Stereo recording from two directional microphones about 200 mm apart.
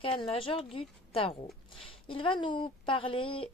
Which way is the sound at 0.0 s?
25° left (ahead or behind).